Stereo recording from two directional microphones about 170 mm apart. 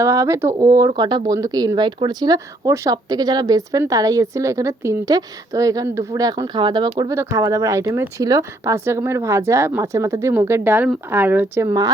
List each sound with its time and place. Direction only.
0.0 s speech: 20° right (ahead or behind)